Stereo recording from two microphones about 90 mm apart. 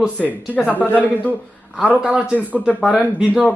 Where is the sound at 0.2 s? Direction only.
15° left (ahead or behind).